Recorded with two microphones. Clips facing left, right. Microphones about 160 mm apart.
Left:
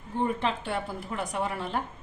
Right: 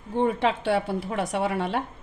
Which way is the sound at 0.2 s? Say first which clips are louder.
Right 5 dB; 75° right (ahead or behind).